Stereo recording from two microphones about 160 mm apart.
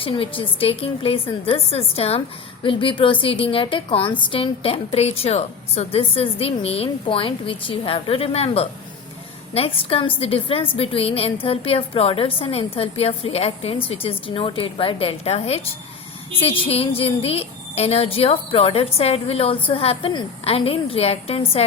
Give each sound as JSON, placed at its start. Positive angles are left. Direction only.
{"t": 0.0, "sound": "a woman's voice", "side_deg": 35}